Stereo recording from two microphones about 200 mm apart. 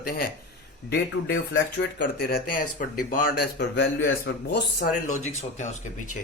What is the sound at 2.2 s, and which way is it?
Speech, 50° left (ahead or behind).